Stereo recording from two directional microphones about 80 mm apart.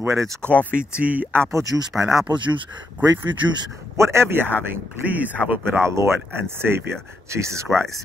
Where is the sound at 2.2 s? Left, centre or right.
Right.